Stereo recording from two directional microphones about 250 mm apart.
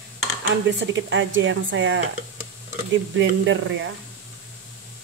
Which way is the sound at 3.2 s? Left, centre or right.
Right.